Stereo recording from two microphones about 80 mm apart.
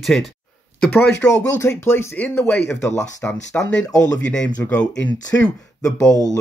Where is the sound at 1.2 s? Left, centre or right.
Left.